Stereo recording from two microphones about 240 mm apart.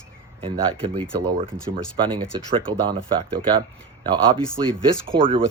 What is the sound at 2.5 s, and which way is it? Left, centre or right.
Speech, centre.